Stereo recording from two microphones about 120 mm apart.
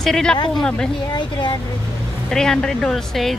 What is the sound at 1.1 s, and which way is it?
Speech, 40° left (ahead or behind).